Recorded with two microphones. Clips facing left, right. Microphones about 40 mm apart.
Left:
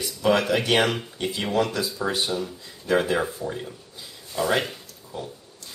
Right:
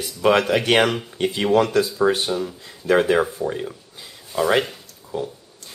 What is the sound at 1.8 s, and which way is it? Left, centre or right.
Speech, centre.